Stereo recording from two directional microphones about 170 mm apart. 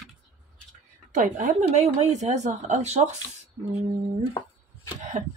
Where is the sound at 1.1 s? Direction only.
50° right (ahead or behind).